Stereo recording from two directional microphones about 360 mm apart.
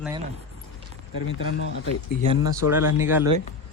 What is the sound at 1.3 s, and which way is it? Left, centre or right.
Speech, left.